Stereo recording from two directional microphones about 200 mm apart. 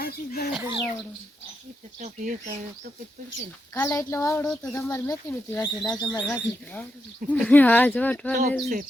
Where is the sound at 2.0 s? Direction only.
40° right (ahead or behind).